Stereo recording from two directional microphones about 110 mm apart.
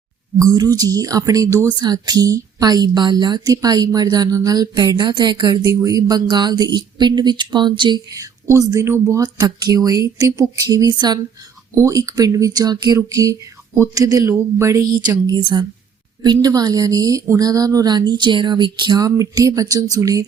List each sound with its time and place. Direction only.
0.3 s a woman's voice: 35° right (ahead or behind)
5.7 s a woman's voice: 30° right (ahead or behind)
8.1 s a woman's voice: 30° right (ahead or behind)
11.7 s a woman's voice: 30° right (ahead or behind)